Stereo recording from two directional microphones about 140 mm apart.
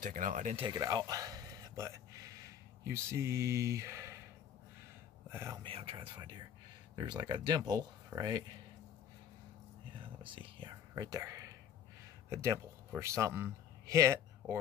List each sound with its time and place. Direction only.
0.0 s speech: 70° right (ahead or behind)
0.6 s speech: 30° right (ahead or behind)
5.3 s speech: 20° right (ahead or behind)
5.6 s speech: 45° right (ahead or behind); by 8.5 s 30° right (ahead or behind)
10.2 s a man's voice: 35° right (ahead or behind); by 14.6 s 20° right (ahead or behind)